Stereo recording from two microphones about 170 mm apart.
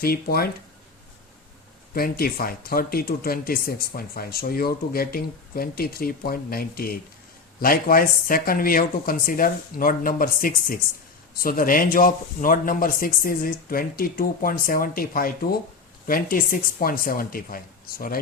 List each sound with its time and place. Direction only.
0.0 s speech: 65° left (ahead or behind)
1.9 s speech: 60° left (ahead or behind)